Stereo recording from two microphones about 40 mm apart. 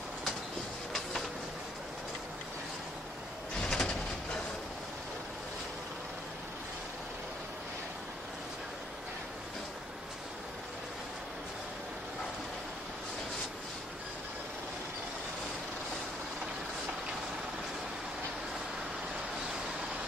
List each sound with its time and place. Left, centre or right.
3.6 s vehicle: centre